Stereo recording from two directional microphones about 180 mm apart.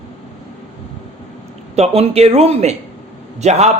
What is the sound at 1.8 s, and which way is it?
A man's voice, 35° right (ahead or behind).